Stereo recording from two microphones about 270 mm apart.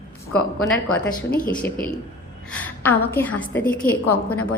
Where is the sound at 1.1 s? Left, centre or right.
Left.